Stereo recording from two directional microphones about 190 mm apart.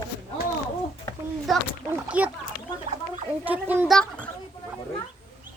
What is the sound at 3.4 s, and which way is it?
Speech, 10° right (ahead or behind).